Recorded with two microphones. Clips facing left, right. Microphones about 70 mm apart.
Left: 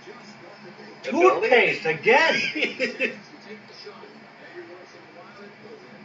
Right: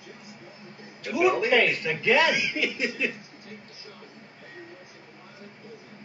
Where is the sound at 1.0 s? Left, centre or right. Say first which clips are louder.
Left 5 dB; centre.